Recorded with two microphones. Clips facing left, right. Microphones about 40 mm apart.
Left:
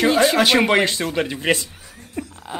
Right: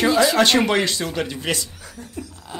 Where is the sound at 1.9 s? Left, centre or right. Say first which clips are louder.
Left 4 dB; left.